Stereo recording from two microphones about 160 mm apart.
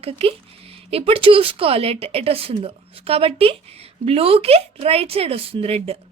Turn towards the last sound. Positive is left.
turn(degrees=-35)  # may be behind; listen again after turning